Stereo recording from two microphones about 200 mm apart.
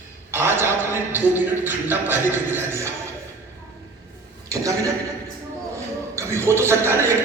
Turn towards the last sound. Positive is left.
turn(degrees=-10)  # may be behind; listen again after turning